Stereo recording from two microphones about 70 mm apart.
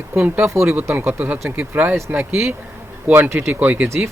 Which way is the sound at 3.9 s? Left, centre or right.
Centre.